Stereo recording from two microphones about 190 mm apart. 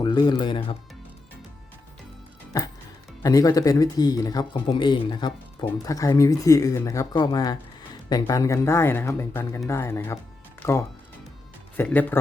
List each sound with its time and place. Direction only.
0.0 s speech: 20° left (ahead or behind)
3.2 s speech: 20° left (ahead or behind)